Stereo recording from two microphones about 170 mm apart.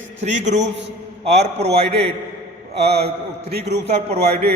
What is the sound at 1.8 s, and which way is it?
Speech, 35° right (ahead or behind).